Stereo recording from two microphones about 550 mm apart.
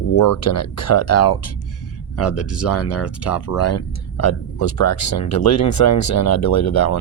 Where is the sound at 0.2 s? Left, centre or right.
Left.